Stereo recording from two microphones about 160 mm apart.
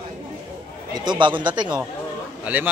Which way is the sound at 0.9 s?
25° right (ahead or behind).